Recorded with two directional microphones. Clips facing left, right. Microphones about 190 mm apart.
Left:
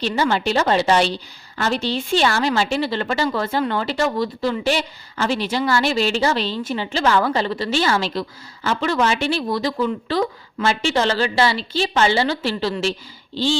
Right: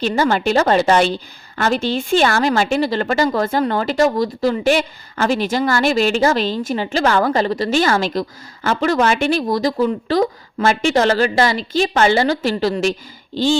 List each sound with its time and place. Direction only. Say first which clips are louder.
0.0 s a woman's voice: right 3 dB; 45° right (ahead or behind)